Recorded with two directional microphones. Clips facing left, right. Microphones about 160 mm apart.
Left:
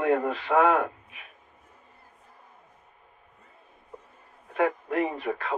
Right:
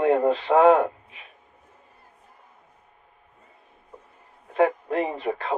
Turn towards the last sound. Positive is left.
turn(degrees=-25)  # may be behind; listen again after turning